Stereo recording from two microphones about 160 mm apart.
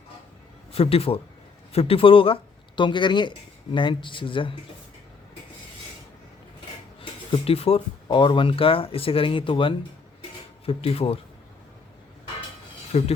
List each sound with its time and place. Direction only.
0.7 s speech: 35° left (ahead or behind)
7.0 s speech: 35° left (ahead or behind)
12.9 s speech: 40° left (ahead or behind)